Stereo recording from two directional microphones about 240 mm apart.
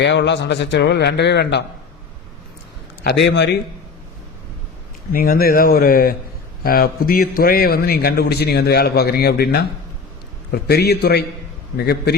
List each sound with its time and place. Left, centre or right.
0.0 s a man's voice: left
3.0 s a man's voice: left
5.1 s a man's voice: left